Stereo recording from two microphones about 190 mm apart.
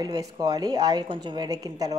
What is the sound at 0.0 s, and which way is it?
A woman's voice, 20° right (ahead or behind).